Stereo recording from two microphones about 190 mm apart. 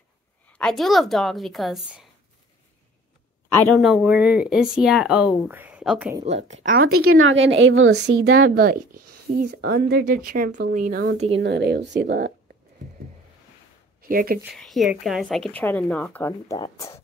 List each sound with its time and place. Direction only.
0.5 s speech: 5° left (ahead or behind)
3.5 s speech: 5° left (ahead or behind)
6.2 s speech: 35° right (ahead or behind)
6.7 s a woman's voice: 90° right; by 11.0 s 45° right (ahead or behind)
11.1 s speech: 30° right (ahead or behind)
11.4 s speech: 65° right (ahead or behind)
14.0 s speech: 50° right (ahead or behind)
14.4 s speech: centre (ahead or behind); by 17.0 s 15° left (ahead or behind)